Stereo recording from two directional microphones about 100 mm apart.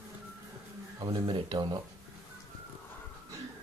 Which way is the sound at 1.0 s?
60° right (ahead or behind).